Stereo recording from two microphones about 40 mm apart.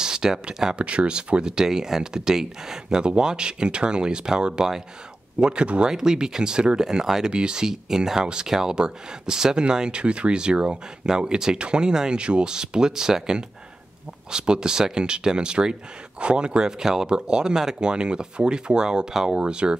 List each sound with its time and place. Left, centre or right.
0.0 s speech: centre
0.7 s speech: right
5.9 s speech: centre